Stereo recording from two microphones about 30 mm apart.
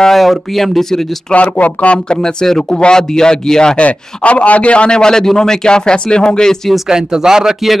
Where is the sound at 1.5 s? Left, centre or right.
Left.